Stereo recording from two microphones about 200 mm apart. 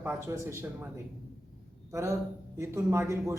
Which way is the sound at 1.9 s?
15° right (ahead or behind).